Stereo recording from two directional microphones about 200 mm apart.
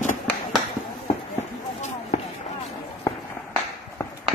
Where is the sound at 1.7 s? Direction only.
35° left (ahead or behind).